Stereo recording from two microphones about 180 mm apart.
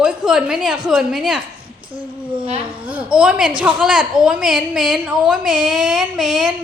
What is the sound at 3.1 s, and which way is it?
A woman's voice, 5° right (ahead or behind).